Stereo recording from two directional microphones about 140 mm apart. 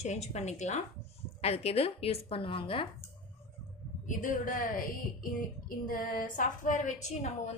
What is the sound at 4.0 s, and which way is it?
A woman's voice, 70° left (ahead or behind).